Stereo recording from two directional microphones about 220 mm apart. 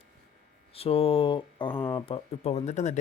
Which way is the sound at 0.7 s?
25° left (ahead or behind).